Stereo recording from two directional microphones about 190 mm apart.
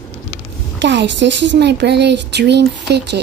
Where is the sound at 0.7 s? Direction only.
70° right (ahead or behind).